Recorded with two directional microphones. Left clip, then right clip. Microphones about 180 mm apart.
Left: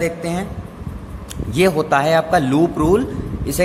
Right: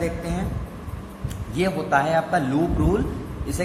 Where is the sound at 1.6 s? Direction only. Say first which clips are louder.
Left 6 dB; 45° left (ahead or behind).